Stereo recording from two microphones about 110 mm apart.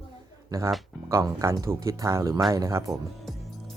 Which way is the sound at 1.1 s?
30° right (ahead or behind).